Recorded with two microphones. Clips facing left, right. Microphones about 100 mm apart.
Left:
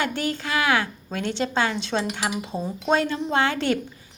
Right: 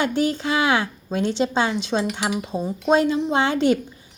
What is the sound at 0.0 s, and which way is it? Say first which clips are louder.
A woman's voice: right 5 dB; 20° right (ahead or behind).